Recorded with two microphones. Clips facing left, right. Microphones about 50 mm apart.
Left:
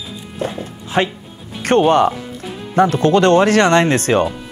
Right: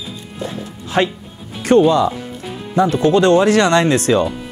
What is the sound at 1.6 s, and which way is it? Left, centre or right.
Speech, left.